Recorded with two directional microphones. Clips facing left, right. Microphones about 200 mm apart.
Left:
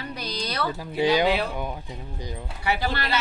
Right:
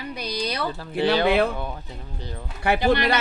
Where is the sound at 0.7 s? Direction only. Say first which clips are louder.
Left 1 dB; 10° left (ahead or behind).